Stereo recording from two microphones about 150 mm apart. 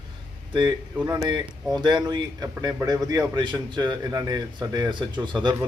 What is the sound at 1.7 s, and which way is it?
A man's voice, 30° right (ahead or behind).